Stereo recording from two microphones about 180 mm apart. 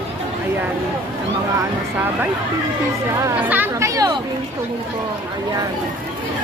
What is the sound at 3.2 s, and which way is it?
Speech, 15° right (ahead or behind).